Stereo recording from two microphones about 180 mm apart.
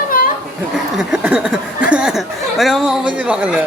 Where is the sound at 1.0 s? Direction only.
5° right (ahead or behind).